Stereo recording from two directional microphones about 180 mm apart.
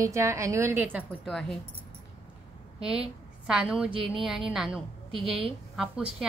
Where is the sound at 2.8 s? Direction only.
5° right (ahead or behind).